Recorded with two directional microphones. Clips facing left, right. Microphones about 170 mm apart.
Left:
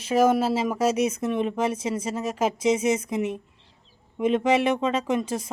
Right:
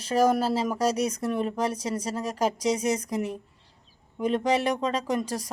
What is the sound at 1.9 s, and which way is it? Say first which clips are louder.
Speech: left 2 dB; 5° left (ahead or behind).